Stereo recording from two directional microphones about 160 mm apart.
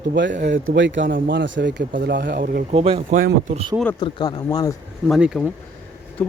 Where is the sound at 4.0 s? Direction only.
30° left (ahead or behind).